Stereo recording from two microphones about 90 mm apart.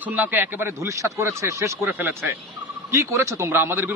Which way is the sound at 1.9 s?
20° right (ahead or behind).